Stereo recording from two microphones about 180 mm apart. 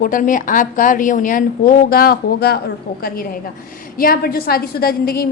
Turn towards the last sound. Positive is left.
turn(degrees=55)  # may be behind; listen again after turning